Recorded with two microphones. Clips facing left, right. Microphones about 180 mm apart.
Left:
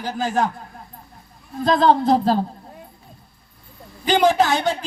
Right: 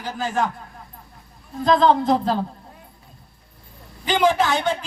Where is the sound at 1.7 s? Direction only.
35° left (ahead or behind).